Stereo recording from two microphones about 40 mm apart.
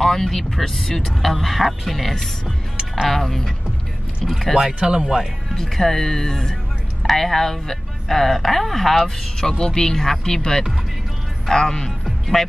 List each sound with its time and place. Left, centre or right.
0.0 s speech: centre
2.4 s speech: centre
3.1 s speech: centre
4.6 s speech: centre
5.5 s speech: centre
9.5 s speech: centre